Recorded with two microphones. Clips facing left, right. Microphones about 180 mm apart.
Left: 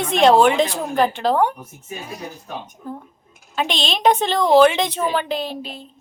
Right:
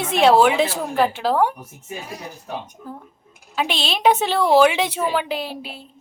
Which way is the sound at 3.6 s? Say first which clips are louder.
Left 1 dB; 5° right (ahead or behind).